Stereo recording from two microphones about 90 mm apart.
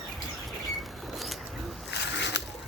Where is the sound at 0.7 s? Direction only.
Centre (ahead or behind).